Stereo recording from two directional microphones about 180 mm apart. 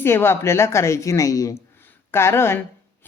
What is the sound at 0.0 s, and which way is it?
Speech, 15° left (ahead or behind).